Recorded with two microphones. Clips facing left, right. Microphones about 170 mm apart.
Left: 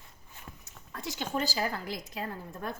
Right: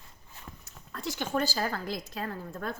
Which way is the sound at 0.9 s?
20° left (ahead or behind).